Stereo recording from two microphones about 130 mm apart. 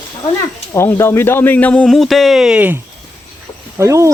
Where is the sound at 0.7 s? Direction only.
20° left (ahead or behind); by 2.8 s 10° right (ahead or behind).